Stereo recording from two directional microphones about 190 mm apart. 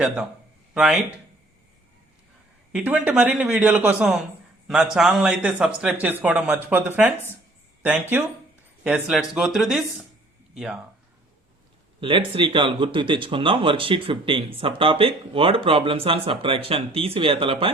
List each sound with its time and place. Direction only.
0.7 s speech: 5° right (ahead or behind)
2.7 s speech: 10° right (ahead or behind)
11.9 s speech: 25° right (ahead or behind)